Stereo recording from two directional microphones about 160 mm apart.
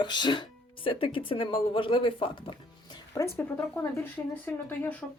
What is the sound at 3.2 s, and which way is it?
Speech, 15° left (ahead or behind).